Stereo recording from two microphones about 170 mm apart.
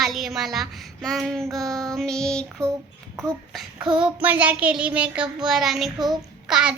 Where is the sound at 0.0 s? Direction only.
Centre (ahead or behind).